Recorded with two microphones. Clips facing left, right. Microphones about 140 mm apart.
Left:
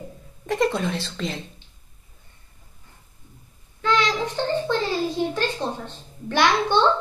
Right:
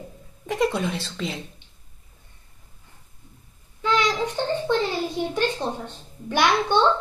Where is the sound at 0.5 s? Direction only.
10° right (ahead or behind).